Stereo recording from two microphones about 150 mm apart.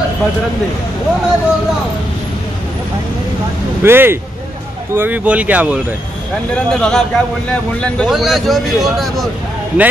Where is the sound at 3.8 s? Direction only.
15° right (ahead or behind).